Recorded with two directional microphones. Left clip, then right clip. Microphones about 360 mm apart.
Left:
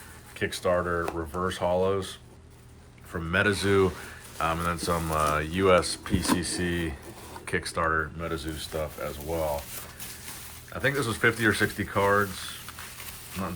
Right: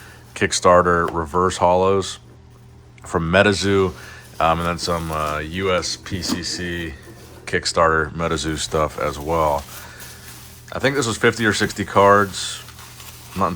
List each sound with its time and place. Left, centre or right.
0.3 s speech: centre
0.8 s speech: right
1.5 s speech: centre
10.7 s speech: centre